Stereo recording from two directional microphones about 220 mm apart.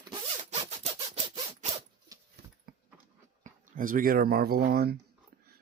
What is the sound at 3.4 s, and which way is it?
Speech, 35° right (ahead or behind).